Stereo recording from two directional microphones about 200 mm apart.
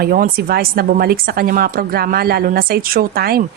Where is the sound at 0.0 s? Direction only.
50° right (ahead or behind).